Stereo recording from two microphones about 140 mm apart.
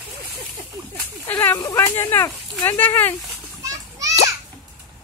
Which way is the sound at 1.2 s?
15° left (ahead or behind).